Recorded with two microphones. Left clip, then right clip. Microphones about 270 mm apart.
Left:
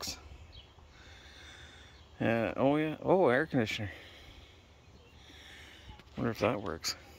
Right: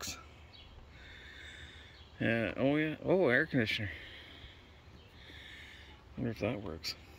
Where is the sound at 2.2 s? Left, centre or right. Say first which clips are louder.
Left 3 dB; centre.